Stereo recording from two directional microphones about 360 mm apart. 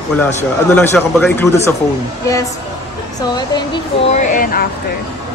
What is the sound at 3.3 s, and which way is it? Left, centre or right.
Speech, centre.